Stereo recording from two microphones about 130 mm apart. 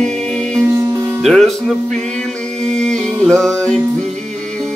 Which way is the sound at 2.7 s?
5° left (ahead or behind).